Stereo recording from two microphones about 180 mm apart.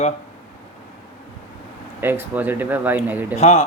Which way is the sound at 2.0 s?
10° right (ahead or behind).